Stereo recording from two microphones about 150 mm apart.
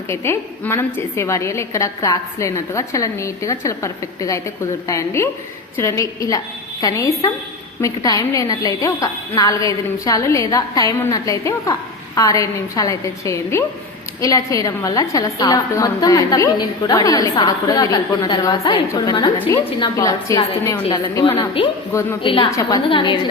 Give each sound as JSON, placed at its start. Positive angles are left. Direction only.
{"t": 0.1, "sound": "a woman's voice", "side_deg": 15}
{"t": 22.2, "sound": "a woman's voice", "side_deg": 35}
{"t": 22.4, "sound": "a woman's voice", "side_deg": 20}
{"t": 22.9, "sound": "a woman's voice", "side_deg": 30}